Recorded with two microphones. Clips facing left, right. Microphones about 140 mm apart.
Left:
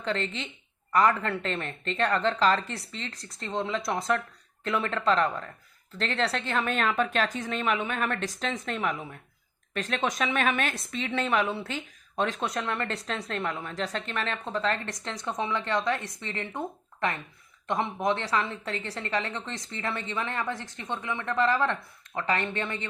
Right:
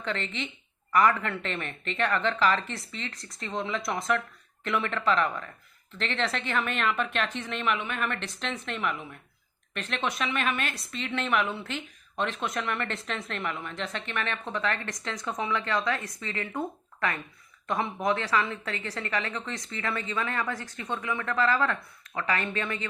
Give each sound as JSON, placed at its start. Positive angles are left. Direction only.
{"t": 0.0, "sound": "a woman's voice", "side_deg": 30}